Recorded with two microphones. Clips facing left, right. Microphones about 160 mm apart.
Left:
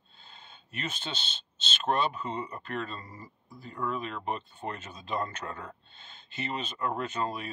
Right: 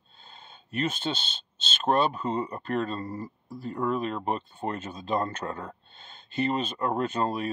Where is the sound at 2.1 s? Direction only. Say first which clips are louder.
Right 6 dB; 35° right (ahead or behind).